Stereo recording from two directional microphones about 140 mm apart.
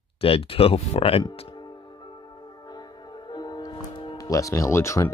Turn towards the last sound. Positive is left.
turn(degrees=20)  # may be behind; listen again after turning